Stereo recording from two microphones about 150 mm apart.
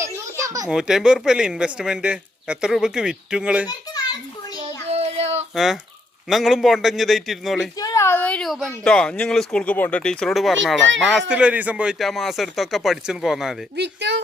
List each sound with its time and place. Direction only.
0.0 s baby laughter: 20° right (ahead or behind)
0.7 s speech: 5° right (ahead or behind)
4.9 s child singing: 45° right (ahead or behind)
5.5 s speech: centre (ahead or behind)
7.8 s speech: 25° left (ahead or behind); by 13.6 s 5° right (ahead or behind)